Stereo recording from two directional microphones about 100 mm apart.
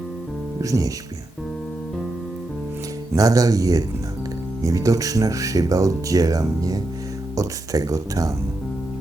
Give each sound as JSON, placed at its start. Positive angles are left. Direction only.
{"t": 0.6, "sound": "speech", "side_deg": -35}
{"t": 3.2, "sound": "speech", "side_deg": -35}